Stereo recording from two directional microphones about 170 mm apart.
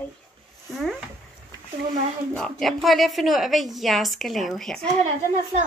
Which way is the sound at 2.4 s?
Centre (ahead or behind).